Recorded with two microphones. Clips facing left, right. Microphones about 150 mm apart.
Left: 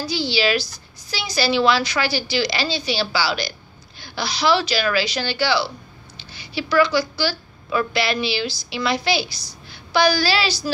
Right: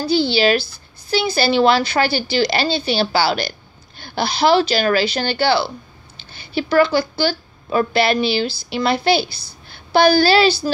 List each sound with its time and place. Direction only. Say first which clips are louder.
0.1 s a woman's voice: right 6 dB; 55° right (ahead or behind)